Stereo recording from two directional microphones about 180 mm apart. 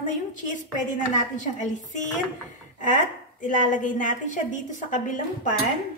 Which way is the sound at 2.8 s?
45° left (ahead or behind).